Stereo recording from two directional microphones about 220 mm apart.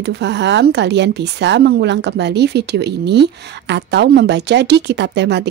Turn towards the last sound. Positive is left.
turn(degrees=-50)  # may be behind; listen again after turning